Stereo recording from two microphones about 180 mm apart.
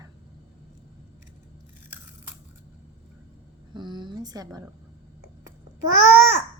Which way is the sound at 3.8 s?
25° right (ahead or behind).